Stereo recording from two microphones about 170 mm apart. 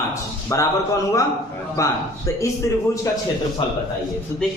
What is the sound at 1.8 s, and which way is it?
Speech, 20° left (ahead or behind).